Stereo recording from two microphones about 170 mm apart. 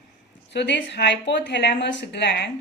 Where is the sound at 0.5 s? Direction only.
90° left.